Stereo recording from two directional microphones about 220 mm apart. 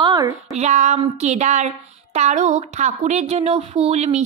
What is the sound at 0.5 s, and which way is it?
Speech, 30° right (ahead or behind).